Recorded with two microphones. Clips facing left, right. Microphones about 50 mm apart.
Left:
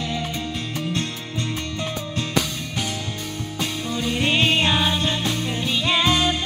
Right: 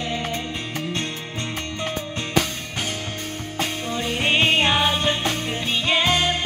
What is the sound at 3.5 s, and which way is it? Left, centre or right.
Music, right.